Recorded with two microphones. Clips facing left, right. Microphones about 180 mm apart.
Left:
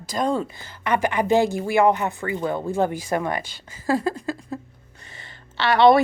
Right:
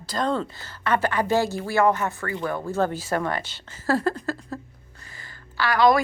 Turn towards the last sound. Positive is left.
turn(degrees=25)  # may be behind; listen again after turning